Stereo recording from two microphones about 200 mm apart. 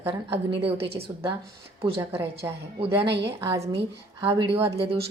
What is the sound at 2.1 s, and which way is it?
Speech, 10° right (ahead or behind).